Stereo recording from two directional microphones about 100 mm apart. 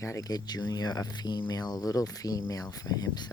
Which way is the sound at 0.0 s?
30° left (ahead or behind).